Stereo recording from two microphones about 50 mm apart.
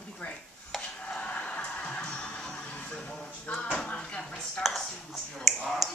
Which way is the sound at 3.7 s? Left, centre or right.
Centre.